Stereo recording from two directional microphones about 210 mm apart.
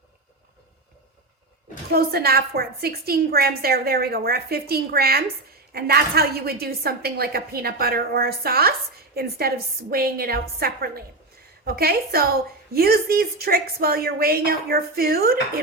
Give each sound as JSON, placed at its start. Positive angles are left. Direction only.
{"t": 1.9, "sound": "a woman's voice", "side_deg": -45}